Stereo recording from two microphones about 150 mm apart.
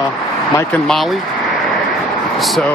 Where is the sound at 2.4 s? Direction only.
Centre (ahead or behind).